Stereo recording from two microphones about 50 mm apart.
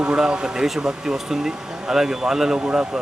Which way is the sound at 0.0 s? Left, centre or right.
Centre.